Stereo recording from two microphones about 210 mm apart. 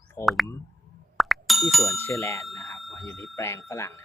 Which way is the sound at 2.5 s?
Centre (ahead or behind).